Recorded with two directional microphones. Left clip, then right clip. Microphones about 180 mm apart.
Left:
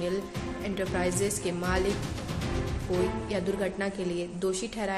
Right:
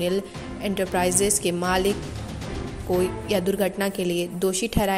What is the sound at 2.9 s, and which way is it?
A woman's voice, 40° right (ahead or behind).